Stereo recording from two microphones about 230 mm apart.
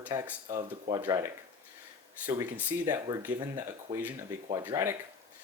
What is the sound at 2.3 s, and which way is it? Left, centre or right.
Speech, centre.